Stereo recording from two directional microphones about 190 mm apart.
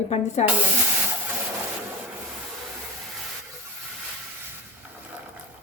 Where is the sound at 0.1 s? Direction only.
35° left (ahead or behind).